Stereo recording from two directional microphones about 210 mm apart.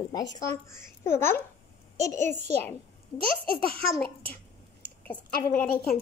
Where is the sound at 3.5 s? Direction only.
45° left (ahead or behind).